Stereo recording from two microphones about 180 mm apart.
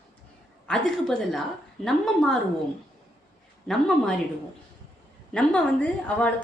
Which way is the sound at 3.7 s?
5° left (ahead or behind).